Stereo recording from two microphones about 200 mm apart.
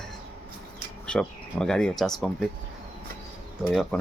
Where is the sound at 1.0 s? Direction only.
5° left (ahead or behind).